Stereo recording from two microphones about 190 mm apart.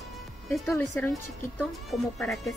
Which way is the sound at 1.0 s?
10° left (ahead or behind).